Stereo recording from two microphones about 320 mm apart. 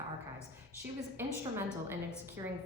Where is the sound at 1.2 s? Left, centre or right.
Centre.